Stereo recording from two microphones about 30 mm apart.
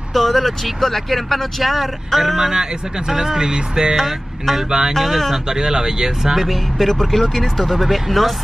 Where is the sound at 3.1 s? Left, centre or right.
Centre.